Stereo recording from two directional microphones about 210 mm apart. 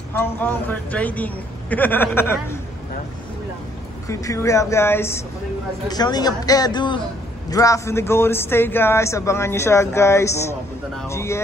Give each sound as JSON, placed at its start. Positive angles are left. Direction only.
{"t": 0.2, "sound": "speech", "side_deg": 10}
{"t": 4.1, "sound": "speech", "side_deg": 15}